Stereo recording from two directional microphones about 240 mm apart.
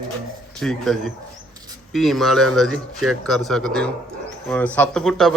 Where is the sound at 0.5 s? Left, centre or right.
Centre.